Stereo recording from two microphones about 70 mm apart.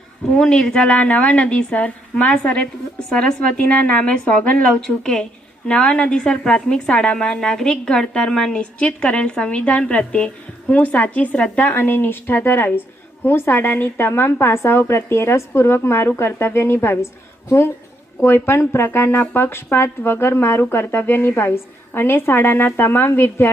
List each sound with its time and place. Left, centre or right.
0.3 s a woman's voice: centre
11.7 s speech: left
18.2 s speech: left